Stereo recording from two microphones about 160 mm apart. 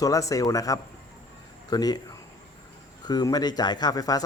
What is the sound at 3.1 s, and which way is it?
Speech, 25° left (ahead or behind).